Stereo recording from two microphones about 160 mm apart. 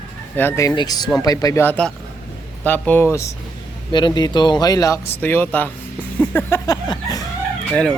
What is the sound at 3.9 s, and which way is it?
Speech, 30° left (ahead or behind).